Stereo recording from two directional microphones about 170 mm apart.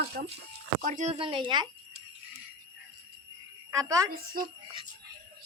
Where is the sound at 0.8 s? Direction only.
50° right (ahead or behind); by 1.6 s 25° right (ahead or behind).